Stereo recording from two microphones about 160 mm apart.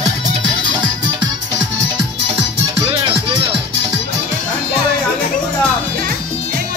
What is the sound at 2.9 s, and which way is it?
Music, 30° right (ahead or behind).